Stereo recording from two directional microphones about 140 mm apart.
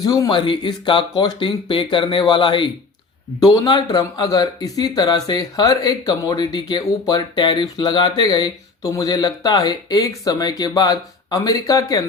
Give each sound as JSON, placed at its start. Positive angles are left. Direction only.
{"t": 0.0, "sound": "speech", "side_deg": 25}